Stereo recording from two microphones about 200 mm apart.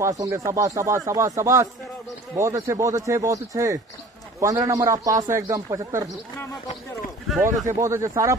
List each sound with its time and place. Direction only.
0.0 s a man's voice: 15° right (ahead or behind)
7.6 s a man's voice: 15° right (ahead or behind)